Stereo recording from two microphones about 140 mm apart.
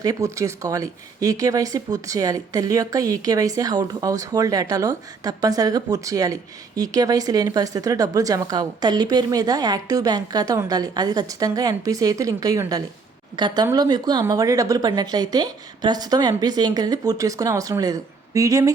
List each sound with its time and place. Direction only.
0.0 s a woman's voice: 25° right (ahead or behind)